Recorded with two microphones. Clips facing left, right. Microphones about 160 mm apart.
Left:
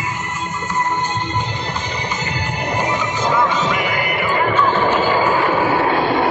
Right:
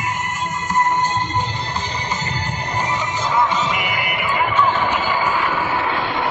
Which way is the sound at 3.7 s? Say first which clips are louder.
Left 3 dB; 20° right (ahead or behind).